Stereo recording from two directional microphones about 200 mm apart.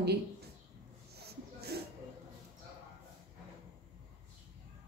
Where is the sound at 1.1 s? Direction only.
55° right (ahead or behind).